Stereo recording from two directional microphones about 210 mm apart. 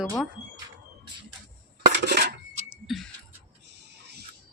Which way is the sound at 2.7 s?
Centre (ahead or behind).